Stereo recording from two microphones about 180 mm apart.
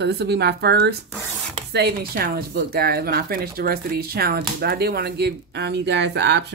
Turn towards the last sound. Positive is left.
turn(degrees=-75)  # may be behind; listen again after turning